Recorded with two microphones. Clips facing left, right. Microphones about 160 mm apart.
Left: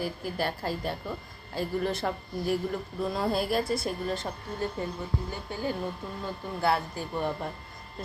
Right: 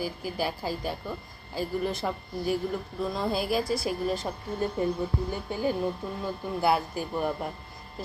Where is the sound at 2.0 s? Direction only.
Centre (ahead or behind).